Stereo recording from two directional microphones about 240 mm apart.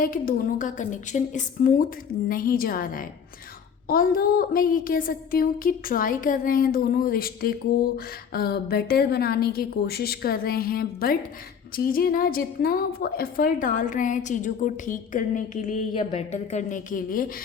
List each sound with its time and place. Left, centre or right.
0.0 s a woman's voice: left